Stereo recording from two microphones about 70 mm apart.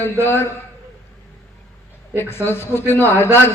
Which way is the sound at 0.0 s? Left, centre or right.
Left.